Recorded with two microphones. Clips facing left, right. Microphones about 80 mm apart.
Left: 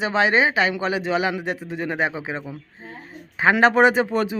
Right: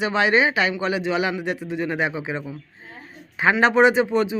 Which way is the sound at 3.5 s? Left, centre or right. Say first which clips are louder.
Left 1 dB; left.